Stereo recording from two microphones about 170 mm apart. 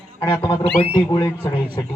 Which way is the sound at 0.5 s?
35° left (ahead or behind).